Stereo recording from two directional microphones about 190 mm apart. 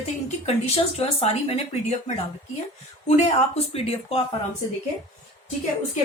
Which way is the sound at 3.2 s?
30° left (ahead or behind).